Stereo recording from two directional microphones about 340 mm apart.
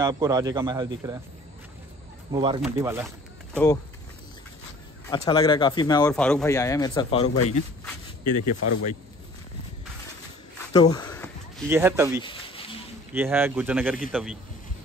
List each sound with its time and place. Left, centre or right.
0.0 s speech: centre
2.3 s speech: centre
3.5 s speech: centre
5.0 s speech: centre
8.4 s speech: left
10.7 s a sound: centre
11.7 s speech: centre
12.2 s a sound: centre
13.1 s a man's voice: centre